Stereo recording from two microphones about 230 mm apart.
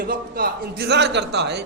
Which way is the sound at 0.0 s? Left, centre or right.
Right.